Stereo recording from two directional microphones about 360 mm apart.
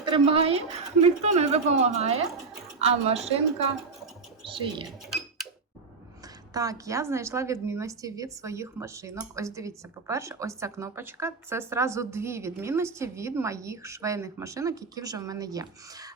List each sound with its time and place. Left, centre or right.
0.0 s a woman's voice: centre
4.9 s cash register: centre
6.5 s a woman's voice: centre